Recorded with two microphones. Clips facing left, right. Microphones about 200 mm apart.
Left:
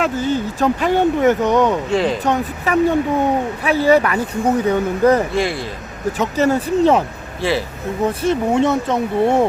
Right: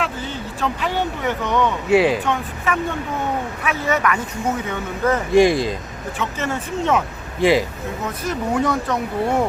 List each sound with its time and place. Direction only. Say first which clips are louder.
0.0 s speech: left 8 dB; 45° left (ahead or behind)
1.9 s speech: right 2 dB; 5° right (ahead or behind)
2.2 s speech: left 4 dB; 40° left (ahead or behind)
5.3 s speech: right 6 dB; 15° right (ahead or behind)
6.1 s speech: left 8 dB; 35° left (ahead or behind)
7.4 s speech: right 4 dB; 15° right (ahead or behind)
8.0 s speech: left 8 dB; 30° left (ahead or behind)